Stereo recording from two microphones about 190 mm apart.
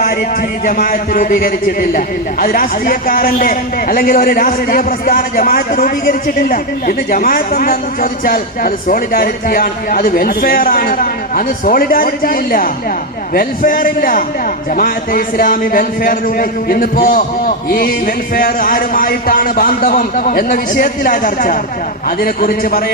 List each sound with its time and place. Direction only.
0.6 s a man's voice: 45° left (ahead or behind)